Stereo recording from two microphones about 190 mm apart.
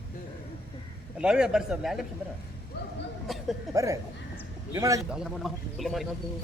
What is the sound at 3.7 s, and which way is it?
A man's voice, 15° right (ahead or behind).